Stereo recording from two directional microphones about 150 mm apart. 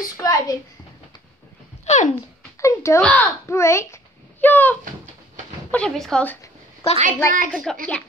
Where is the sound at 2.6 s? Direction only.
20° left (ahead or behind); by 6.3 s 5° left (ahead or behind).